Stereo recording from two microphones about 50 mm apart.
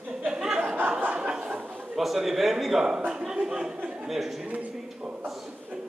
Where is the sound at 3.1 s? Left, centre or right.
Centre.